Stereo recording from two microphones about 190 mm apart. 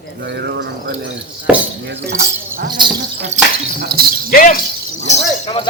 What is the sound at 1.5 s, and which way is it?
Speech, 5° right (ahead or behind).